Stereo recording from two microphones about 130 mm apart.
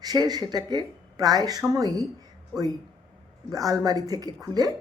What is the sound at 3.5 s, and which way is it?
Speech, 25° right (ahead or behind).